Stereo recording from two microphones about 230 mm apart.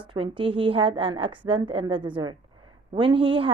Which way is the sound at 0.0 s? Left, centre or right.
Right.